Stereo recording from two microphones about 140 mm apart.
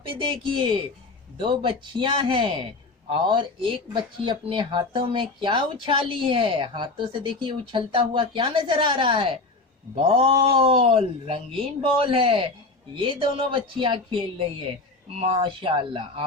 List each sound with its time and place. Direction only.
0.1 s a woman's voice: 35° right (ahead or behind)